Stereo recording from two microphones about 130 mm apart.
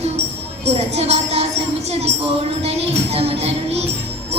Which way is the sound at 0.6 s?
55° right (ahead or behind).